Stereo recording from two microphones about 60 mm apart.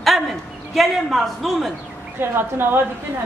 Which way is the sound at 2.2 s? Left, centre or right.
Right.